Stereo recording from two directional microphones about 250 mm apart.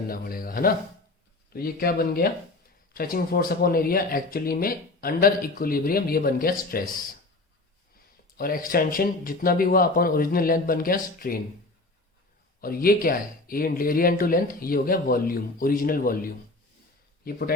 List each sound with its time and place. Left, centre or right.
0.1 s speech: left
8.4 s speech: left
12.6 s speech: left